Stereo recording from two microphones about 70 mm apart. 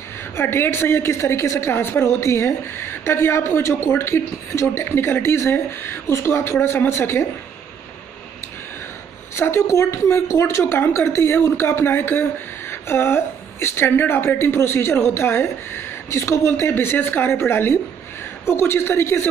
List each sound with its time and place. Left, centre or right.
0.4 s speech: left
9.3 s speech: left
10.6 s speech: left